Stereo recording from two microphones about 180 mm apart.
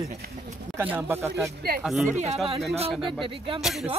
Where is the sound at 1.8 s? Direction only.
Centre (ahead or behind).